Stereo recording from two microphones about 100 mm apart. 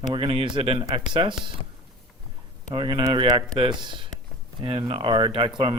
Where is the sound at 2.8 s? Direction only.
50° right (ahead or behind).